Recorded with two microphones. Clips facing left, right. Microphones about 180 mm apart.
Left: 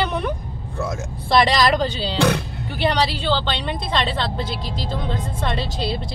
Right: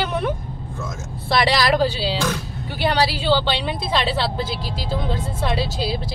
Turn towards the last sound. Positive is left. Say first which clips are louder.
# right 1 dB
turn(degrees=0)  # may be behind; listen again after turning